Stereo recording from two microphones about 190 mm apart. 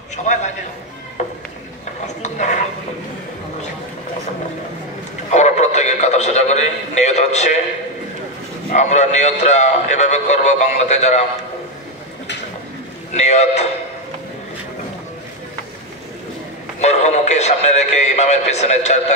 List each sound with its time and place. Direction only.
0.1 s a man's voice: 40° left (ahead or behind)
2.0 s dishes: 40° left (ahead or behind)
5.3 s a man's voice: 35° left (ahead or behind)
8.7 s a man's voice: 35° left (ahead or behind)
13.1 s a man's voice: 35° left (ahead or behind)
16.8 s a man's voice: 35° left (ahead or behind)